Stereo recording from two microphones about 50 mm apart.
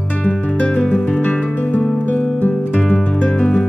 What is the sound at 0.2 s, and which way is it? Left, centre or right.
Music, left.